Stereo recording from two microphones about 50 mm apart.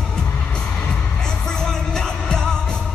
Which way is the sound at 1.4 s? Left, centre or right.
Centre.